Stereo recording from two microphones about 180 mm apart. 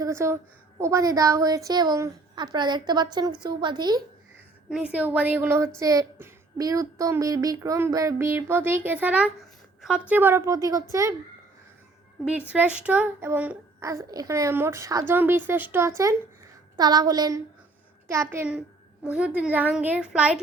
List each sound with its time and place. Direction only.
0.0 s a woman's voice: 15° right (ahead or behind)
4.7 s speech: 5° right (ahead or behind)
12.2 s a woman's voice: 5° right (ahead or behind)